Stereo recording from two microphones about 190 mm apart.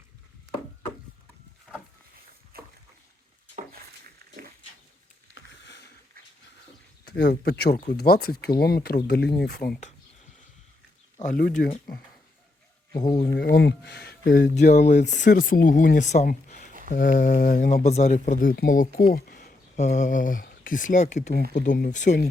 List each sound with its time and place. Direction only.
2.5 s boat: 50° right (ahead or behind)
5.3 s a sound: 65° left (ahead or behind)
7.0 s speech: 60° left (ahead or behind)
11.2 s speech: 45° left (ahead or behind)
12.9 s speech: 20° left (ahead or behind)
13.2 s speech: 60° left (ahead or behind)
14.7 s speech: 40° left (ahead or behind)